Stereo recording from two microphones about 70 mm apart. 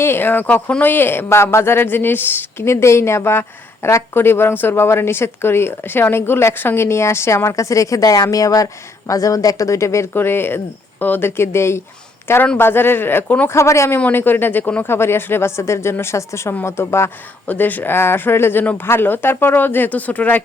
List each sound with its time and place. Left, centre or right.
0.0 s speech: left
0.4 s speech: centre
2.6 s a woman's voice: left
13.2 s speech: centre
13.5 s a woman's voice: left
14.1 s speech: left
14.8 s a woman's voice: left
17.4 s a woman's voice: left
18.6 s speech: left
18.9 s speech: left